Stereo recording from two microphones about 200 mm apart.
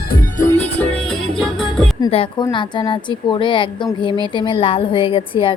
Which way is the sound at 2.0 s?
25° left (ahead or behind).